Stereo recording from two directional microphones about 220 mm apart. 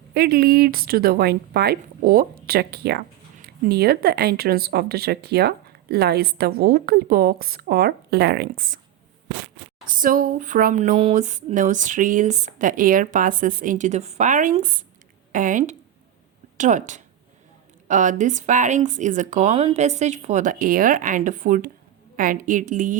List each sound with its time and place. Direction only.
0.1 s speech: 45° right (ahead or behind)
9.8 s speech: 40° right (ahead or behind)
10.9 s speech: 30° right (ahead or behind)